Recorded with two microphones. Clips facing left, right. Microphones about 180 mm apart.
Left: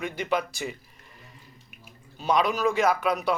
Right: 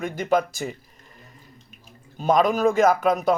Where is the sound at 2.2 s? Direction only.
45° right (ahead or behind).